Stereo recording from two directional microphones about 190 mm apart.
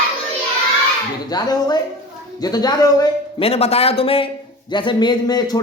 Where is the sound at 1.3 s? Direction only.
20° left (ahead or behind).